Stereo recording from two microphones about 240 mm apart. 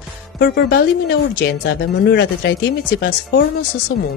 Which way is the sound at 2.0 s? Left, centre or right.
Left.